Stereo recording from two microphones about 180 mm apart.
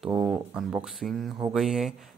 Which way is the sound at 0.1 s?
15° right (ahead or behind).